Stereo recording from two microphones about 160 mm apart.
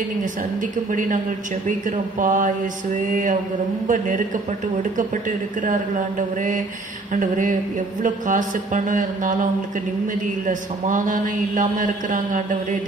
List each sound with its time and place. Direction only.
0.9 s a man's voice: 55° right (ahead or behind)
5.7 s a man's voice: 55° right (ahead or behind)